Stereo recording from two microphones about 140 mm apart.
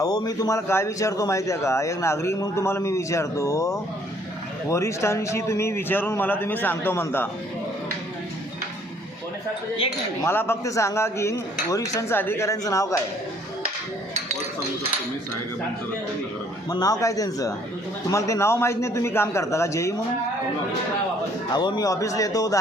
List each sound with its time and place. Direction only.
0.0 s a man's voice: 30° left (ahead or behind)
10.2 s a man's voice: 15° left (ahead or behind)
16.6 s a man's voice: 25° left (ahead or behind)
21.5 s a man's voice: 30° left (ahead or behind)